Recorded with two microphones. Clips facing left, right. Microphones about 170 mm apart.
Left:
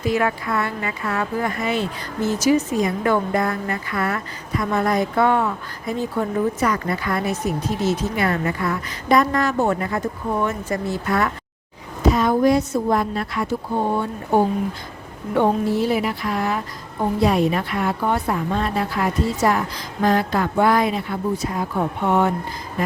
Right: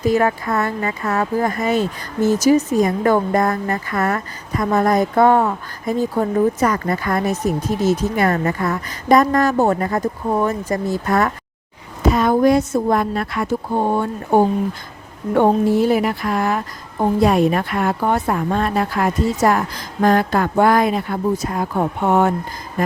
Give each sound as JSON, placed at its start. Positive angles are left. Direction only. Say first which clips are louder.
{"t": 0.0, "sound": "a woman's voice", "louder": "right 4 dB", "side_deg": -40}
{"t": 12.0, "sound": "a woman's voice", "louder": "right 2 dB", "side_deg": -55}